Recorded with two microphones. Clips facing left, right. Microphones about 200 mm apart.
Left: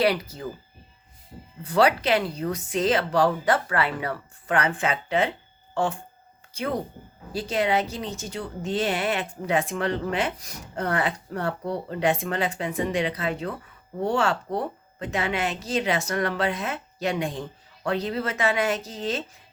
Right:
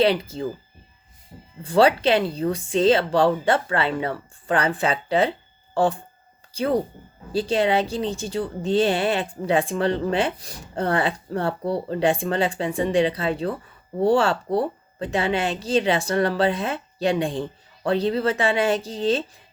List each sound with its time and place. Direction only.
0.0 s speech: 25° right (ahead or behind)
1.6 s speech: 30° right (ahead or behind)